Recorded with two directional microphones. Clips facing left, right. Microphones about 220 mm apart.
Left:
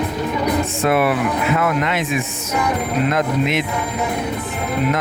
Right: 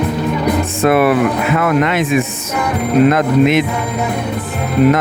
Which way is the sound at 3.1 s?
65° right (ahead or behind).